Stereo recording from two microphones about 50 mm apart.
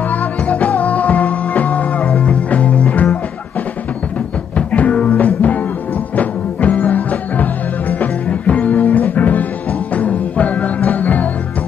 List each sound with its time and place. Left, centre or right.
0.1 s music: left
4.6 s music: left